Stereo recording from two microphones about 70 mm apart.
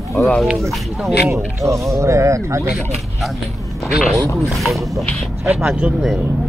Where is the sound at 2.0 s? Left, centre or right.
Right.